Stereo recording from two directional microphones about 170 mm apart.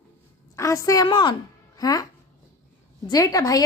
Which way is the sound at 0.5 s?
20° left (ahead or behind).